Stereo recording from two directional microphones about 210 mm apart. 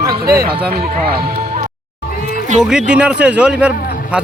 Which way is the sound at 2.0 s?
45° left (ahead or behind).